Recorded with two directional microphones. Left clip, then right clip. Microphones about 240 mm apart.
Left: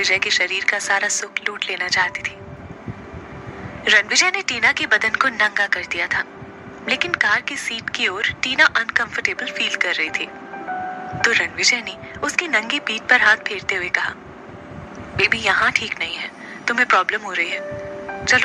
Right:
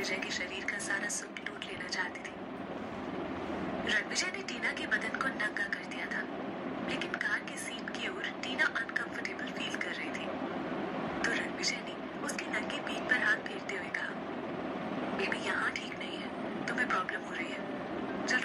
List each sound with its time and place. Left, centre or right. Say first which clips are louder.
0.0 s a woman's voice: left 18 dB; left
3.8 s a woman's voice: left 19 dB; left
15.1 s a woman's voice: left 18 dB; left